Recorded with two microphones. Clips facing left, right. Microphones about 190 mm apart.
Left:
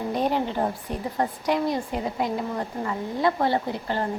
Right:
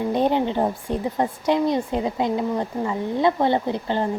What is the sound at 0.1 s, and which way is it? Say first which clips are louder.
A woman's voice: right 4 dB; 25° right (ahead or behind).